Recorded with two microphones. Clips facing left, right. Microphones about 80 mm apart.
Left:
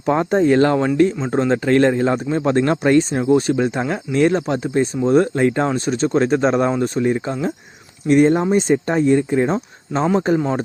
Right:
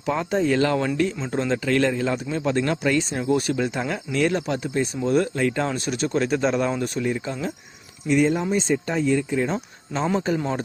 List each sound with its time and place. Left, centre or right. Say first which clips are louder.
0.0 s a man's voice: left 6 dB; left
8.0 s speech: left 6 dB; left
10.3 s speech: left 6 dB; left